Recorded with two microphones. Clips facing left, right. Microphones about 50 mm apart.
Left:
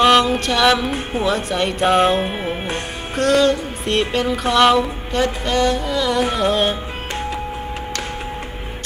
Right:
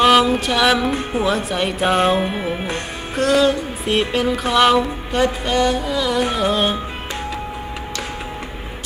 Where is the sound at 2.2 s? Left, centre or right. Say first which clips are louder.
Right 1 dB; centre.